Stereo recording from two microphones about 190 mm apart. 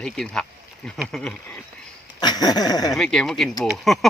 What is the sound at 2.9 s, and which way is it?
Speech, 5° left (ahead or behind).